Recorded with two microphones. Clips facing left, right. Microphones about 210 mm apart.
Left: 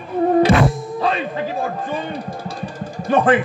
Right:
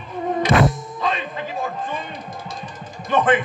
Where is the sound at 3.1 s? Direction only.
30° left (ahead or behind).